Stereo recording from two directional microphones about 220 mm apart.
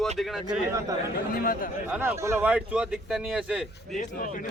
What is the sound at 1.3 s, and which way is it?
Speech, 40° left (ahead or behind).